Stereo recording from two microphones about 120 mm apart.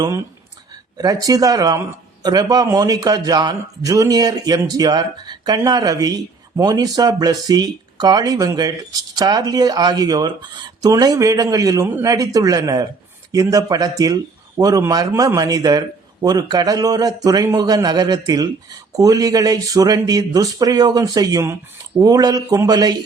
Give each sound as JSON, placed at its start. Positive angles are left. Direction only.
{"t": 0.9, "sound": "speech", "side_deg": -30}